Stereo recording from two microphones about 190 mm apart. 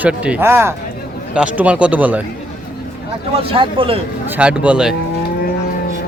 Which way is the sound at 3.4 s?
30° right (ahead or behind).